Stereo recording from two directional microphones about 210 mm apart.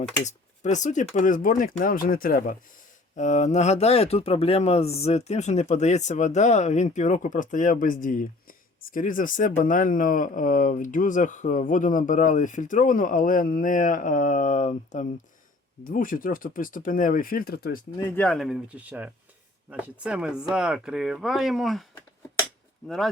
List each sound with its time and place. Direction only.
0.3 s speech: 35° left (ahead or behind)
18.2 s speech: centre (ahead or behind)